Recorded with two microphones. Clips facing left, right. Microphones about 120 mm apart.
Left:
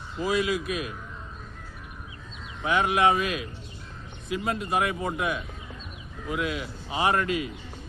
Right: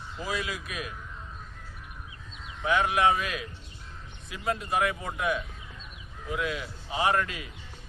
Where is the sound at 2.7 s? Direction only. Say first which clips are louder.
Left 1 dB; 20° left (ahead or behind).